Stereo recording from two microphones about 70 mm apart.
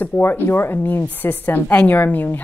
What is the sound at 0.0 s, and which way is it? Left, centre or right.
A woman's voice, left.